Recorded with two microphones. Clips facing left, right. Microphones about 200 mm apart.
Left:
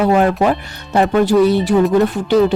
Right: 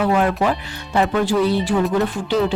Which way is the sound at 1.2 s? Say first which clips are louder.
Left 6 dB; 70° left (ahead or behind).